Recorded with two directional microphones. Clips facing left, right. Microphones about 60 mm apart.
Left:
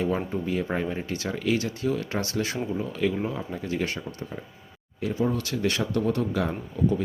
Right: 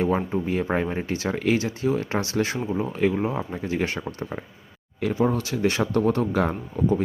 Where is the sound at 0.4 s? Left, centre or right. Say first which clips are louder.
Right 3 dB; right.